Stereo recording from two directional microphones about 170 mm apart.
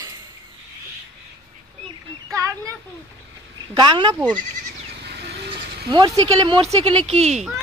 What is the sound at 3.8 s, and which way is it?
Speech, 25° right (ahead or behind).